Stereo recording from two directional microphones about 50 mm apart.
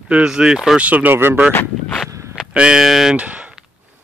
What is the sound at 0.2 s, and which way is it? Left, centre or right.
Speech, centre.